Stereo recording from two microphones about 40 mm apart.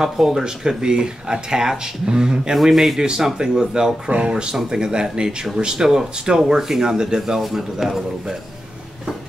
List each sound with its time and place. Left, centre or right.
0.0 s speech: centre
2.5 s a man's voice: centre
7.3 s speech: centre